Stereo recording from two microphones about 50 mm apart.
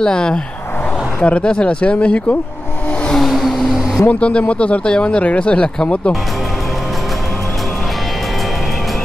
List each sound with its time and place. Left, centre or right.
0.0 s speech: centre
3.2 s vehicle: centre
4.1 s speech: left